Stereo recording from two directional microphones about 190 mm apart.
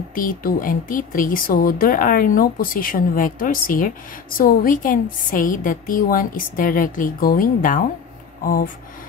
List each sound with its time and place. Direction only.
0.1 s speech: 45° left (ahead or behind)